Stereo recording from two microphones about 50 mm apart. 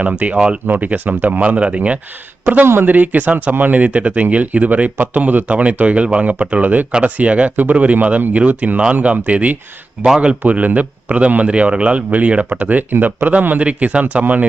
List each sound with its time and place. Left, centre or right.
0.0 s speech: right
0.3 s speech: centre
0.7 s speech: right
2.8 s speech: right
10.0 s speech: centre
10.4 s speech: right